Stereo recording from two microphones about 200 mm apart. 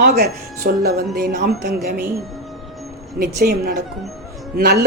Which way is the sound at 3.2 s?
50° right (ahead or behind).